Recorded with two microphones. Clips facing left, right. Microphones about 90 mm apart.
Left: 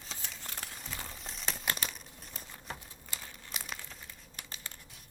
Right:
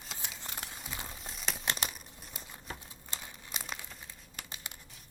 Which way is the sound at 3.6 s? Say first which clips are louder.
Right 2 dB; 5° right (ahead or behind).